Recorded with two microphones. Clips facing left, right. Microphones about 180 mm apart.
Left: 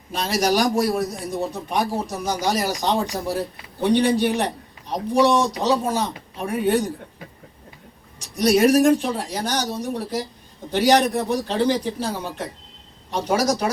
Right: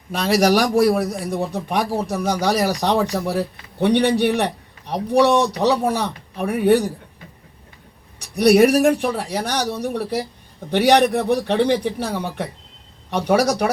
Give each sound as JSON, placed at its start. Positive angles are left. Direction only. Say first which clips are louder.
{"t": 0.1, "sound": "a man's voice", "louder": "right 5 dB", "side_deg": -60}
{"t": 8.2, "sound": "a man's voice", "louder": "right 4 dB", "side_deg": -65}